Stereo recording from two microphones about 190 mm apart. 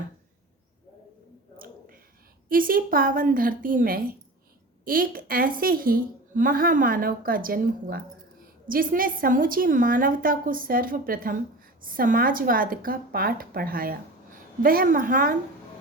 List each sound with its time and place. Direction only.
2.5 s a woman's voice: 50° right (ahead or behind)